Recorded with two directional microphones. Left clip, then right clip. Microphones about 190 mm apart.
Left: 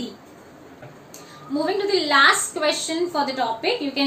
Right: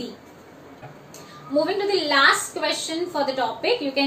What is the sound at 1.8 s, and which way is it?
A woman's voice, 30° left (ahead or behind).